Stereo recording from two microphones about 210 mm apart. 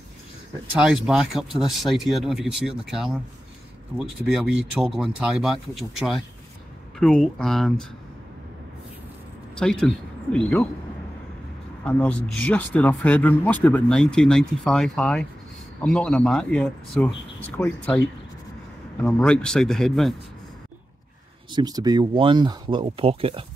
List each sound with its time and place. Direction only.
0.7 s speech: 5° right (ahead or behind)
9.6 s speech: 5° left (ahead or behind)
11.8 s speech: 5° left (ahead or behind)
19.0 s speech: 5° left (ahead or behind)
21.5 s speech: 20° right (ahead or behind)